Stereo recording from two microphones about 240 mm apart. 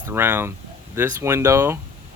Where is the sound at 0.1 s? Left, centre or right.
Centre.